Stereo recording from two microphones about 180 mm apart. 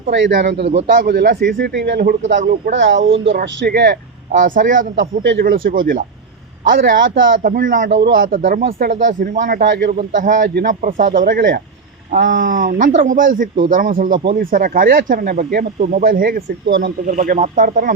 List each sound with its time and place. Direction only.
0.1 s a man's voice: 85° right
0.9 s a man's voice: 55° right (ahead or behind)
2.4 s speech: 50° right (ahead or behind)
2.7 s speech: 90° right; by 3.9 s 65° right (ahead or behind)
4.3 s speech: 45° right (ahead or behind)
4.9 s speech: 90° right
5.5 s speech: 55° right (ahead or behind)
7.4 s speech: 50° right (ahead or behind)
7.9 s speech: 75° right (ahead or behind); by 16.4 s 50° right (ahead or behind)
16.6 s speech: 80° right
17.1 s speech: 45° right (ahead or behind)